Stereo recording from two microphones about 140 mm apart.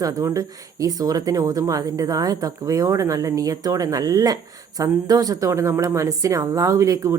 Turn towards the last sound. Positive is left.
turn(degrees=-20)  # may be behind; listen again after turning